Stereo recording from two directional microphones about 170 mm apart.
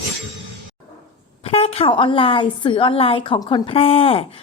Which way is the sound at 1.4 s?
35° left (ahead or behind).